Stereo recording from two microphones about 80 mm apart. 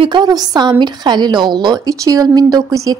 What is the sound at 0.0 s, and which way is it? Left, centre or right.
Speech, right.